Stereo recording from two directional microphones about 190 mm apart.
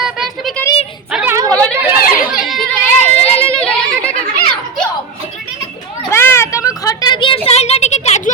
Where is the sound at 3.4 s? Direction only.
5° left (ahead or behind).